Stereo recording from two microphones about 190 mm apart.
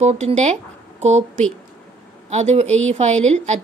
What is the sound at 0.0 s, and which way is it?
Speech, 35° right (ahead or behind).